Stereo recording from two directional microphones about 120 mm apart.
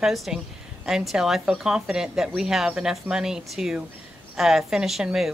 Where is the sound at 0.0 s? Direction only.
Centre (ahead or behind).